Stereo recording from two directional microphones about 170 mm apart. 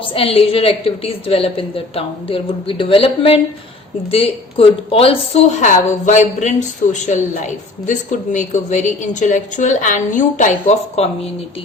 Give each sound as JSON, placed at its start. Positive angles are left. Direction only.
{"t": 0.0, "sound": "a woman's voice", "side_deg": 35}